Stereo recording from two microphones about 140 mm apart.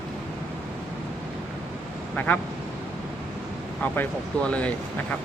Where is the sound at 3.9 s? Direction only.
10° left (ahead or behind).